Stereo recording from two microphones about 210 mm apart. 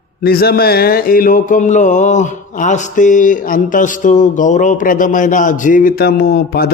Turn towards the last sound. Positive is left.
turn(degrees=50)  # may be behind; listen again after turning